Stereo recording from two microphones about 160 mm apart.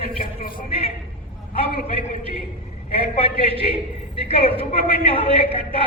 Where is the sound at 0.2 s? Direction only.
65° left (ahead or behind).